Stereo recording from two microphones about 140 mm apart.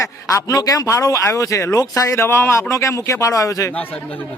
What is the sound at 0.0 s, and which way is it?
Speech, 25° left (ahead or behind).